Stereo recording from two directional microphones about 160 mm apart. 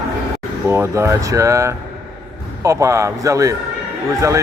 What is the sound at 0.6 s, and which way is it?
Speech, 15° right (ahead or behind).